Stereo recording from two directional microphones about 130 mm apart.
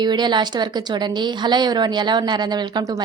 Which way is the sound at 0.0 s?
35° right (ahead or behind).